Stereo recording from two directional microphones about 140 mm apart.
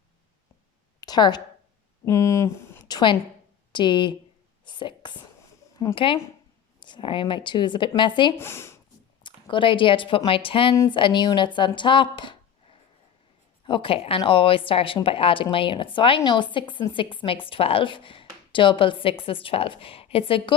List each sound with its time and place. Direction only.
1.0 s a woman's voice: 30° left (ahead or behind)
2.8 s a woman's voice: 30° left (ahead or behind)
8.4 s speech: 20° left (ahead or behind)
9.2 s speech: 35° left (ahead or behind)